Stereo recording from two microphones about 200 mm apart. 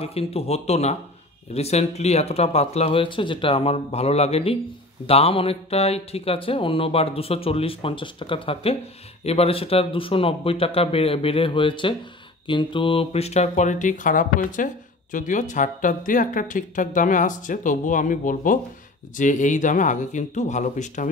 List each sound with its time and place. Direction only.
0.0 s speech: 30° left (ahead or behind)